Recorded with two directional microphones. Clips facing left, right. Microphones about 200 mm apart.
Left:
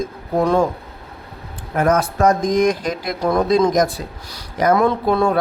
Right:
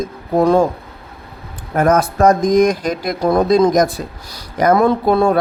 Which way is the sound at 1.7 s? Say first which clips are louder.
Right 3 dB; 40° right (ahead or behind).